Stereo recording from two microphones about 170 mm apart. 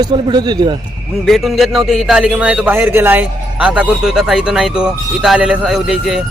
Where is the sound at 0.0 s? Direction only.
25° right (ahead or behind).